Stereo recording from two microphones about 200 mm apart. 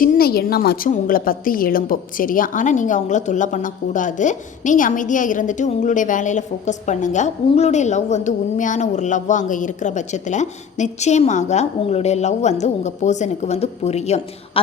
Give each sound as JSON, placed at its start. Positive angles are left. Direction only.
{"t": 0.0, "sound": "a woman's voice", "side_deg": 45}